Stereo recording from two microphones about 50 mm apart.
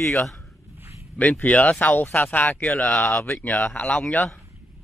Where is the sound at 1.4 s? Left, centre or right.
Left.